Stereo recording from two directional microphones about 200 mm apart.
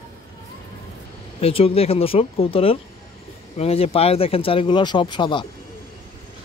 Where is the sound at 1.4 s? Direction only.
30° left (ahead or behind).